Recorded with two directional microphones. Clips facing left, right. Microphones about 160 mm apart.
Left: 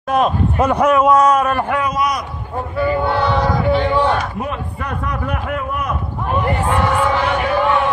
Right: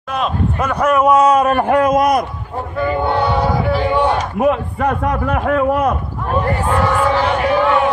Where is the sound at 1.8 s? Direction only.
50° right (ahead or behind).